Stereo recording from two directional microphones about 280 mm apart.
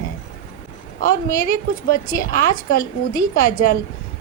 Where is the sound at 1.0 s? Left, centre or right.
Left.